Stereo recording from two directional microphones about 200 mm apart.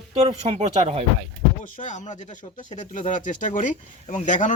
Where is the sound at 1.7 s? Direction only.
35° left (ahead or behind).